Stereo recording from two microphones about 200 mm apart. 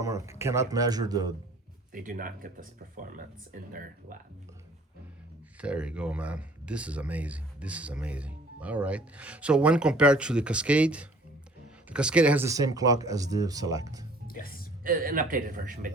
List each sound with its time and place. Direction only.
0.0 s speech: 15° right (ahead or behind)
1.9 s speech: 45° right (ahead or behind)
5.5 s speech: 5° right (ahead or behind)
14.3 s music: 45° left (ahead or behind)
14.8 s speech: 45° right (ahead or behind)